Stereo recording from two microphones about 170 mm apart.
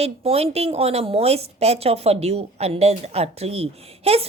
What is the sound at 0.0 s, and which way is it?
A woman's voice, 35° right (ahead or behind).